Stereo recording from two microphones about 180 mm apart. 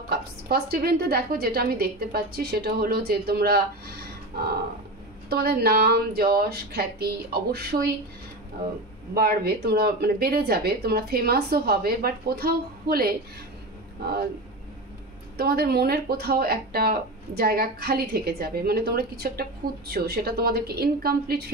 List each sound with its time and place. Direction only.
0.1 s speech: 60° right (ahead or behind)
5.3 s speech: 60° right (ahead or behind)
9.1 s speech: 55° right (ahead or behind)
15.3 s speech: 60° right (ahead or behind)